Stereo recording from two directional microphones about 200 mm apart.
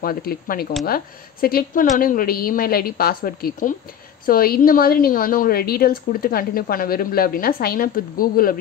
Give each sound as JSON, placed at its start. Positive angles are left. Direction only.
{"t": 0.0, "sound": "a woman's voice", "side_deg": 45}